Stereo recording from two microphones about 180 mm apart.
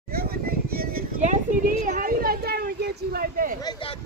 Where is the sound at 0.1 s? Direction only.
55° right (ahead or behind).